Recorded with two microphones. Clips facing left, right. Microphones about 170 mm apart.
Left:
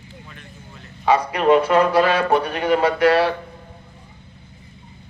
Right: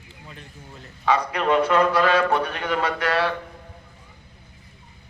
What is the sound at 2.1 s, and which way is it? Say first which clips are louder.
Speech: left 2 dB; 35° left (ahead or behind).